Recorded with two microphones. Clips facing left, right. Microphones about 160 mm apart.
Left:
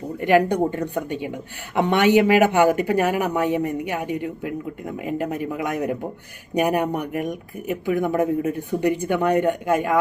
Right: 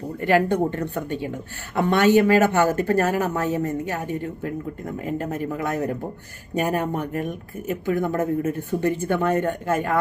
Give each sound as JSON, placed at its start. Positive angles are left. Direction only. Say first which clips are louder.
{"t": 0.2, "sound": "speech", "louder": "left 2 dB", "side_deg": 15}